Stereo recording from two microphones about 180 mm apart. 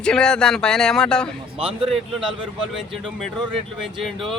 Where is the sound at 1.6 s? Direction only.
30° right (ahead or behind).